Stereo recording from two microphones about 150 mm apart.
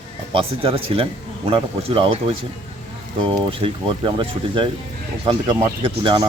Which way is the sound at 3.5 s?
35° right (ahead or behind).